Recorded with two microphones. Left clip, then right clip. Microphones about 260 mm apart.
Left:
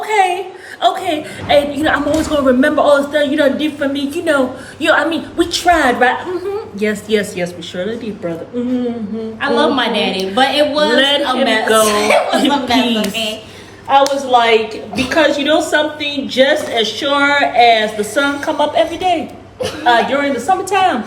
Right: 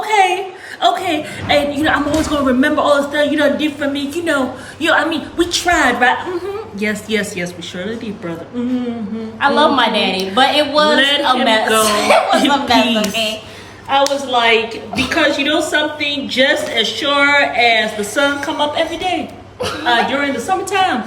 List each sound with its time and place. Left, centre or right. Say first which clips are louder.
0.0 s a sound: even; centre
0.8 s a man's voice: even; centre
9.4 s a woman's voice: right 2 dB; centre
10.9 s a man's voice: left 1 dB; centre
11.9 s a woman's voice: even; centre
13.9 s a woman's voice: left 3 dB; centre